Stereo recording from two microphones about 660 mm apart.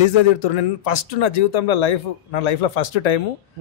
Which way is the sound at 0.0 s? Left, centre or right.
Left.